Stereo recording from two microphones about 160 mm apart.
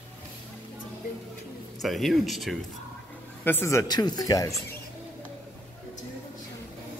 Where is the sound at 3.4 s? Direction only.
15° left (ahead or behind).